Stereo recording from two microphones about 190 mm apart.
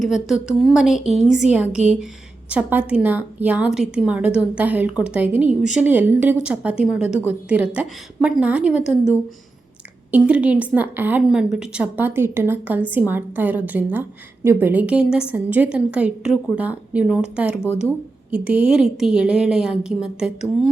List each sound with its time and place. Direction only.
0.0 s a woman's voice: centre (ahead or behind)
10.1 s a woman's voice: 10° right (ahead or behind)